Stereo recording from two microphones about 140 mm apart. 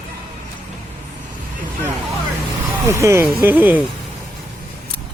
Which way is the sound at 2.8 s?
20° right (ahead or behind).